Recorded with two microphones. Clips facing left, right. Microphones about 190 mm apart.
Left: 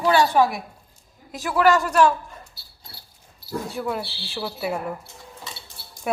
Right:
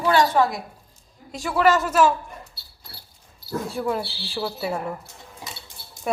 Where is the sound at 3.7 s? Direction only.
Centre (ahead or behind).